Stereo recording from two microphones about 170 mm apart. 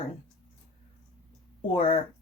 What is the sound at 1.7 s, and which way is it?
Speech, 35° left (ahead or behind).